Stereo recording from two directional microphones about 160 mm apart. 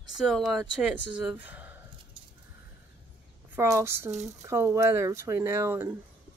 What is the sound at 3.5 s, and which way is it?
Speech, 15° right (ahead or behind).